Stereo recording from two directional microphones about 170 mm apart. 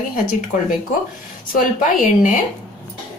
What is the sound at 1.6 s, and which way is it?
Speech, 50° left (ahead or behind).